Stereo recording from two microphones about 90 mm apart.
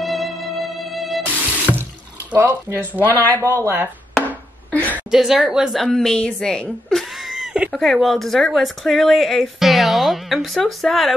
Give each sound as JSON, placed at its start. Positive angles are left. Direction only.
{"t": 0.0, "sound": "music", "side_deg": 0}
{"t": 2.3, "sound": "speech", "side_deg": -20}
{"t": 3.0, "sound": "speech", "side_deg": 20}
{"t": 3.4, "sound": "speech", "side_deg": -25}
{"t": 4.6, "sound": "a sound", "side_deg": 15}
{"t": 5.1, "sound": "speech", "side_deg": -5}